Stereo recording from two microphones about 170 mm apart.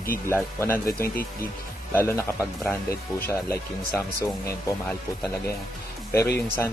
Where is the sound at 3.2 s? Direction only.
15° left (ahead or behind).